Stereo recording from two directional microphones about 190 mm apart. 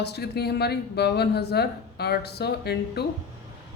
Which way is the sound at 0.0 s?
60° left (ahead or behind).